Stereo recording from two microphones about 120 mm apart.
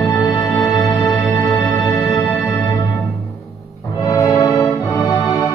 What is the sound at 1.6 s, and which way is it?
Music, 20° left (ahead or behind).